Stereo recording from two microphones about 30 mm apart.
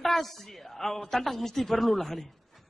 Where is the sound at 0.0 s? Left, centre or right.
Centre.